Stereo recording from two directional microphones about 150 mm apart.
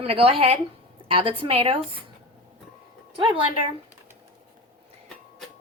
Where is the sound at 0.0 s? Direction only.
40° right (ahead or behind).